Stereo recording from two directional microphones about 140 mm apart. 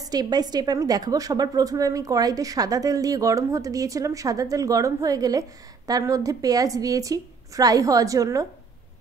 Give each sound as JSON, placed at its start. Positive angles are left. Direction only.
{"t": 0.1, "sound": "a woman's voice", "side_deg": -30}